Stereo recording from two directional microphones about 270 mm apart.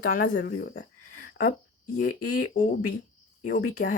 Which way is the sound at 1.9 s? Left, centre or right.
Left.